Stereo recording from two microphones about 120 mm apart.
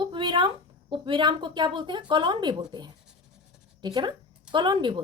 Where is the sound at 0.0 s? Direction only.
40° right (ahead or behind).